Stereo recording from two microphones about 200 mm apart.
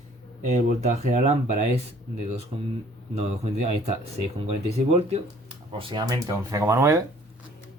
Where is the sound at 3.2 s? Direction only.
30° right (ahead or behind); by 7.0 s 15° right (ahead or behind).